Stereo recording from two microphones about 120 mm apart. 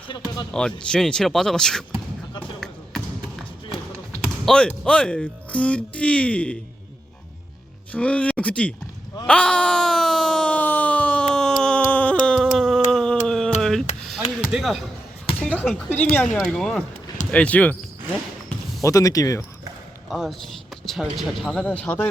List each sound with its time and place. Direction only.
0.1 s speech: 35° left (ahead or behind)
0.5 s speech: 5° left (ahead or behind)
4.4 s speech: 5° left (ahead or behind)
7.9 s speech: 10° left (ahead or behind)
9.2 s a sound: 10° left (ahead or behind)
12.3 s a sound: centre (ahead or behind)
15.4 s a sound: 10° left (ahead or behind)
16.1 s speech: 10° left (ahead or behind)
18.8 s speech: 30° left (ahead or behind)
20.1 s speech: 5° right (ahead or behind)
21.7 s speech: 15° left (ahead or behind)